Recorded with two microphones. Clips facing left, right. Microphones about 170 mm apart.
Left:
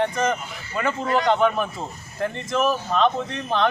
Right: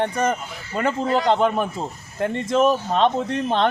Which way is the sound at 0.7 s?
35° right (ahead or behind).